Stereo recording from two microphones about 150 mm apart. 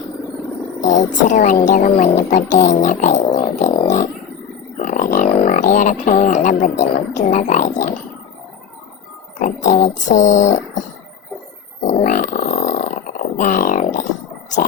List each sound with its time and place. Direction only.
0.8 s speech: 55° left (ahead or behind)
3.3 s music: 45° left (ahead or behind)
4.8 s speech: 55° left (ahead or behind)
9.4 s speech: 55° left (ahead or behind)
11.9 s grunt: 55° left (ahead or behind)